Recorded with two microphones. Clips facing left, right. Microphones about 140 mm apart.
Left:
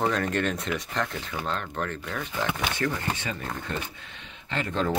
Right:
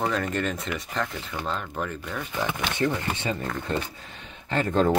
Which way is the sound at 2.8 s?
30° right (ahead or behind).